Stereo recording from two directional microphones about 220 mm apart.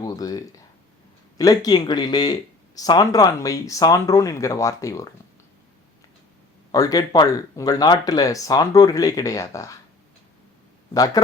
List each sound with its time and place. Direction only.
0.0 s a sound: 15° left (ahead or behind)
1.4 s speech: 15° left (ahead or behind)
6.7 s speech: 15° left (ahead or behind)
10.9 s speech: 15° left (ahead or behind)